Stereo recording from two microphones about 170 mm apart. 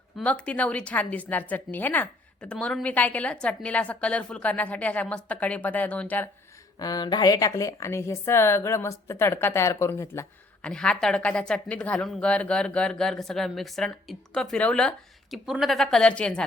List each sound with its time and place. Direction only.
0.2 s a woman's voice: 5° left (ahead or behind)
6.7 s a woman's voice: 20° left (ahead or behind); by 16.4 s 5° left (ahead or behind)